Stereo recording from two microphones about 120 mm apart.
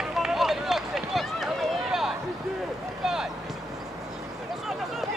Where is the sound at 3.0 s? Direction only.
5° right (ahead or behind).